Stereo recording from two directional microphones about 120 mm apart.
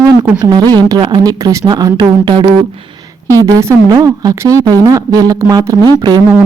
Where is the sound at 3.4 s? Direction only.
25° right (ahead or behind).